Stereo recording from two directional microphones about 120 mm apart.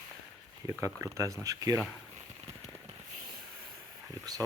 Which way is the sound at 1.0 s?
25° right (ahead or behind).